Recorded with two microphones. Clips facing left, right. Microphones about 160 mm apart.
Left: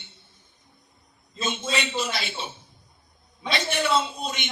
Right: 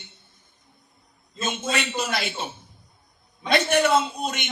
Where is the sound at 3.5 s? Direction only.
50° right (ahead or behind).